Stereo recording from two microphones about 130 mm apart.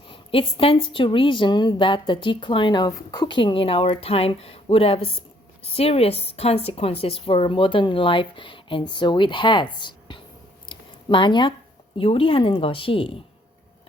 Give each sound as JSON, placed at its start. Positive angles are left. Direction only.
{"t": 0.1, "sound": "a woman's voice", "side_deg": 40}
{"t": 10.7, "sound": "a sound", "side_deg": 40}
{"t": 11.9, "sound": "a woman's voice", "side_deg": 45}